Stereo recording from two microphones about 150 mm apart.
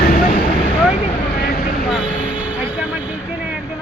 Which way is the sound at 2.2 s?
5° right (ahead or behind).